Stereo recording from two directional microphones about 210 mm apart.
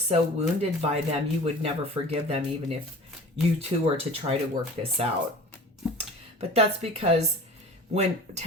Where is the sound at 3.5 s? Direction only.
30° right (ahead or behind).